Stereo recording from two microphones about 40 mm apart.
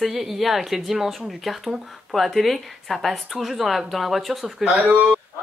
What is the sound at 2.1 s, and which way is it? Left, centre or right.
A woman's voice, centre.